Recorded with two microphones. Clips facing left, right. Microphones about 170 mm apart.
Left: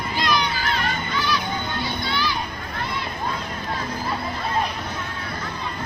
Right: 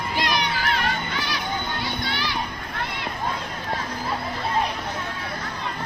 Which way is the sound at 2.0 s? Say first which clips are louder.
Left 3 dB; 75° right (ahead or behind).